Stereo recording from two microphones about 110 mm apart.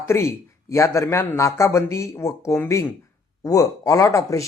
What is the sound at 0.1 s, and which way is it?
A man's voice, 25° left (ahead or behind).